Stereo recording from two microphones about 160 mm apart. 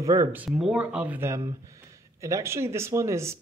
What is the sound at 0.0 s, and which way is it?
Speech, 20° right (ahead or behind).